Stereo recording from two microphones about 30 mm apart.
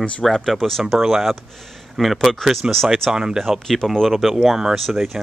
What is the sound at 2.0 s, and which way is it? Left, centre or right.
Speech, centre.